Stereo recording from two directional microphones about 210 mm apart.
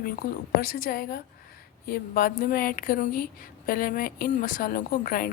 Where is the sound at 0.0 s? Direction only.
45° left (ahead or behind).